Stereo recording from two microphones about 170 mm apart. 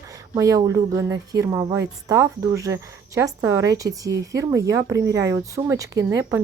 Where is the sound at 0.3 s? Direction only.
20° right (ahead or behind).